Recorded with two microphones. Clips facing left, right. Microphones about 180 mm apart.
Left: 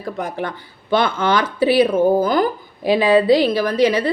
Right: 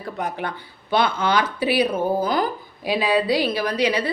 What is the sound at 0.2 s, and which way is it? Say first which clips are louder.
A woman's voice: even; 45° left (ahead or behind).